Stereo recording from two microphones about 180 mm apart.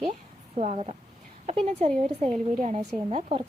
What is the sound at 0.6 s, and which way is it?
Speech, 35° right (ahead or behind).